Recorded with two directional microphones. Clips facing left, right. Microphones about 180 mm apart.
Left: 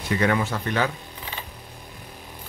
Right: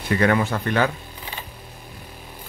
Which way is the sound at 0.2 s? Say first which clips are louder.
Right 3 dB; 55° right (ahead or behind).